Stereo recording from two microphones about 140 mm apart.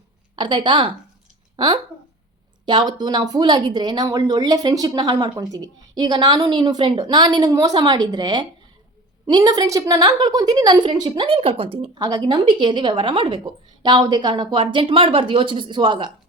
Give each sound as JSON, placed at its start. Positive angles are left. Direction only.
{"t": 0.3, "sound": "a woman's voice", "side_deg": -35}
{"t": 11.9, "sound": "speech", "side_deg": -25}